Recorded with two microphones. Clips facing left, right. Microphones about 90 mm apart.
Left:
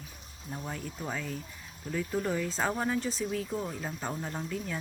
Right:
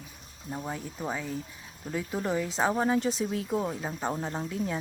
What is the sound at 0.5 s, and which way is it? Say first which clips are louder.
Speech: right 3 dB; 15° right (ahead or behind).